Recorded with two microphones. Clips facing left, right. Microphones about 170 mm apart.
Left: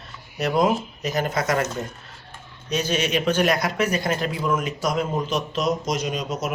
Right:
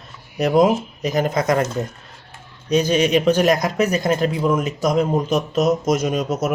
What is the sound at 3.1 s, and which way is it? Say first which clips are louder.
A man's voice: right 3 dB; 40° right (ahead or behind).